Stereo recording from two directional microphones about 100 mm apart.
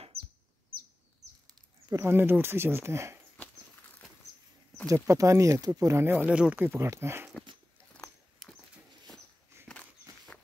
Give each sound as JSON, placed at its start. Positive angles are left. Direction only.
{"t": 1.9, "sound": "speech", "side_deg": -25}
{"t": 4.8, "sound": "speech", "side_deg": -30}
{"t": 6.1, "sound": "speech", "side_deg": -15}
{"t": 10.1, "sound": "a sound", "side_deg": -45}